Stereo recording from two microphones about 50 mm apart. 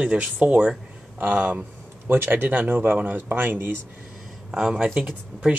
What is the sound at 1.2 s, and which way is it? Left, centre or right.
Speech, right.